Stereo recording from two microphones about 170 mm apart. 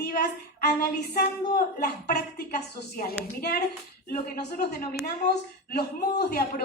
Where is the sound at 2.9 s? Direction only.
60° left (ahead or behind).